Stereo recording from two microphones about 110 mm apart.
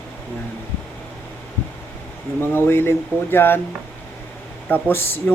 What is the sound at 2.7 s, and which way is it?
Speech, 20° left (ahead or behind).